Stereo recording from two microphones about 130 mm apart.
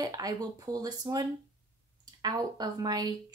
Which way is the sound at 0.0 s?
30° right (ahead or behind).